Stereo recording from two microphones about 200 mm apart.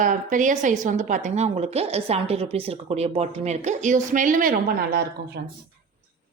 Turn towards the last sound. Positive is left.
turn(degrees=-55)  # may be behind; listen again after turning